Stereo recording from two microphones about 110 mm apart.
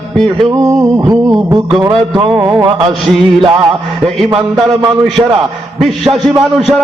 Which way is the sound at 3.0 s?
Centre (ahead or behind).